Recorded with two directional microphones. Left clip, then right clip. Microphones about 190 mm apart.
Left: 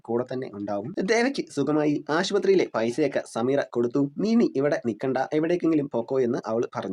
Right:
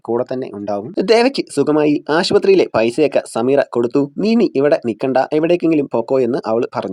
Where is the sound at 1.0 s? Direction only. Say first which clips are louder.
Right 11 dB; 45° right (ahead or behind).